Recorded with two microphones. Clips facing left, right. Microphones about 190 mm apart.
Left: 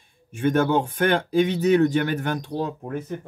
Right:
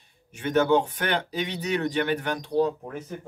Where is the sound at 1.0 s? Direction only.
50° left (ahead or behind).